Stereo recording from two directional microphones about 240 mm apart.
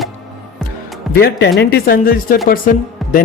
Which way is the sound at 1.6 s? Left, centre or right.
Left.